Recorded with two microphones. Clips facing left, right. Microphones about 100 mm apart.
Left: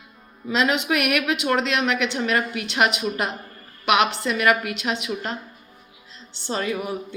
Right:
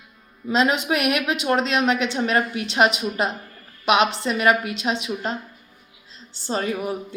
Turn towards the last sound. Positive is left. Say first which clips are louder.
# right 1 dB
turn(degrees=-35)  # may be behind; listen again after turning